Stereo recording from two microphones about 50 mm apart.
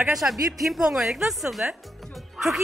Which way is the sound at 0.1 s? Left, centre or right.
Centre.